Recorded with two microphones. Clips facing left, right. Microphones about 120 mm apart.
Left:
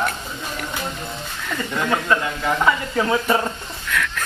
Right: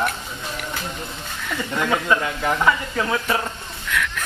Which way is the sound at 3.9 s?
15° right (ahead or behind).